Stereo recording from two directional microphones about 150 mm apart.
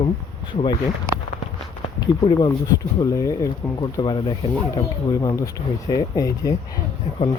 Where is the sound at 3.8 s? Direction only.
30° left (ahead or behind).